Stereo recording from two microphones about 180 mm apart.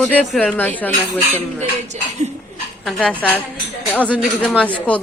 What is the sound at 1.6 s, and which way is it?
Dishes, 40° right (ahead or behind).